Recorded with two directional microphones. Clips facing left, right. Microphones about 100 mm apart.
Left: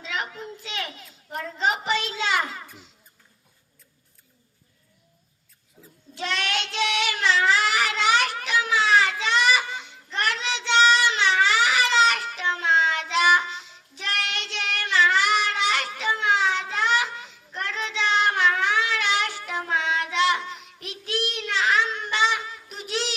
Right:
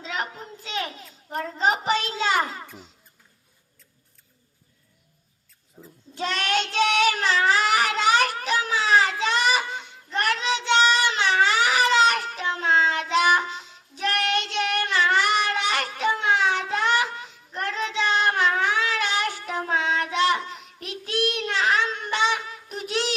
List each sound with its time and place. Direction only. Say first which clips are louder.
0.0 s a woman's voice: right 1 dB; 35° right (ahead or behind)
5.8 s a woman's voice: right 5 dB; 35° right (ahead or behind)
6.1 s child singing: right 3 dB; 40° right (ahead or behind)